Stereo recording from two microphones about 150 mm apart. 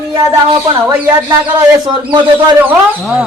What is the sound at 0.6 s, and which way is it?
A man's voice, 25° right (ahead or behind).